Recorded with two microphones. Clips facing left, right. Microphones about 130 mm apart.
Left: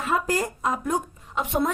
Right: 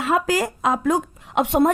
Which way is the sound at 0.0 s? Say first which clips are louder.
Right 4 dB; 90° right.